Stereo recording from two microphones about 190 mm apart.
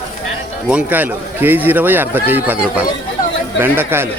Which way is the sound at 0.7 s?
10° right (ahead or behind).